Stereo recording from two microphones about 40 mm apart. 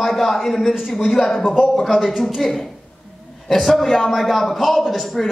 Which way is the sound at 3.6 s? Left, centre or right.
Centre.